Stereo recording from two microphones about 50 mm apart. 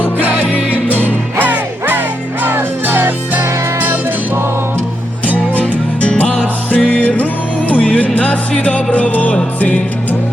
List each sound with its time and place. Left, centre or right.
0.2 s music: right
0.5 s music: left
1.4 s music: right
5.5 s music: left